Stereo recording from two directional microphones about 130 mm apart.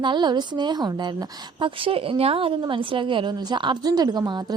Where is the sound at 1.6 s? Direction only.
45° right (ahead or behind).